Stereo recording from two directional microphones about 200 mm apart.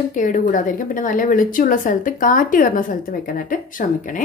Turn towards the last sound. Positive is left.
turn(degrees=45)  # may be behind; listen again after turning